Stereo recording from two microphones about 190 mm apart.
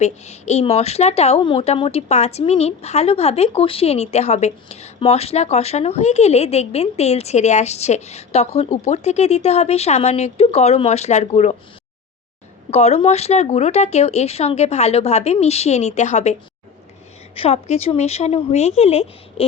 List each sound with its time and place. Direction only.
0.0 s speech: 35° left (ahead or behind)
12.7 s speech: 35° left (ahead or behind)
17.3 s speech: 30° left (ahead or behind)